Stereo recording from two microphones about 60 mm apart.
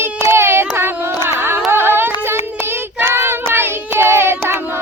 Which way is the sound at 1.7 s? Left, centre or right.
Right.